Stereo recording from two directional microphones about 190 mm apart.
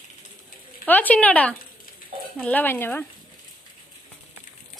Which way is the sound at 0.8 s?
10° left (ahead or behind).